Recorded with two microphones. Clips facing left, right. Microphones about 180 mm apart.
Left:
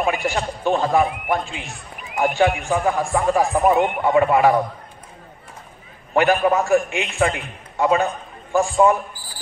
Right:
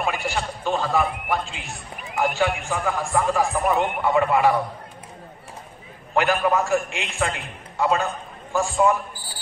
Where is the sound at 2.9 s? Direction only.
55° left (ahead or behind).